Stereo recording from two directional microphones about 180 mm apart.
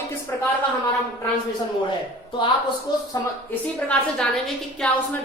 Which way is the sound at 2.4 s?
25° left (ahead or behind).